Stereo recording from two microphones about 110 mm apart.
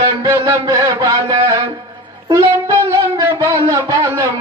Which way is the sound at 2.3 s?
30° right (ahead or behind).